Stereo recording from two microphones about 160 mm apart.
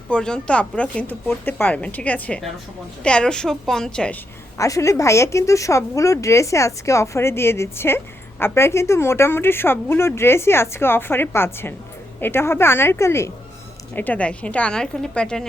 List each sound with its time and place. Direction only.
0.1 s a woman's voice: 5° left (ahead or behind)
4.5 s speech: 20° left (ahead or behind)